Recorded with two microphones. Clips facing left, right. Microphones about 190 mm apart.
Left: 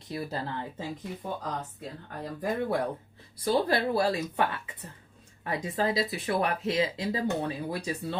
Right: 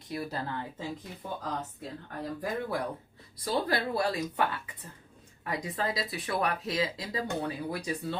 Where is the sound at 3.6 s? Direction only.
25° left (ahead or behind).